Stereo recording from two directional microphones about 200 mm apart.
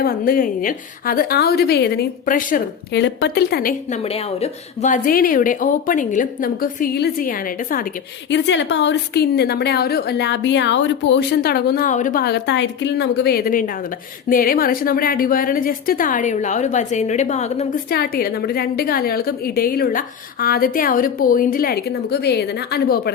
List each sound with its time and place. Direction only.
0.0 s a woman's voice: 45° left (ahead or behind)
2.9 s a woman's voice: 60° left (ahead or behind); by 7.9 s 45° left (ahead or behind)
8.3 s a woman's voice: 65° left (ahead or behind); by 17.7 s 35° left (ahead or behind)
17.9 s a woman's voice: 50° left (ahead or behind)